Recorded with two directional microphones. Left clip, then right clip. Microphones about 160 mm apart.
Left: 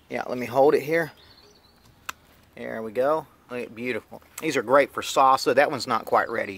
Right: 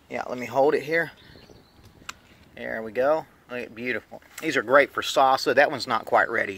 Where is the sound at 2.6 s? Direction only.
15° left (ahead or behind).